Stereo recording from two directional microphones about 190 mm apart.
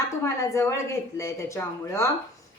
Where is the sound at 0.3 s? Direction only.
15° left (ahead or behind).